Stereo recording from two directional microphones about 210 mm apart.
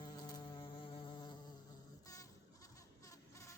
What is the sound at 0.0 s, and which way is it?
Insect, 20° left (ahead or behind).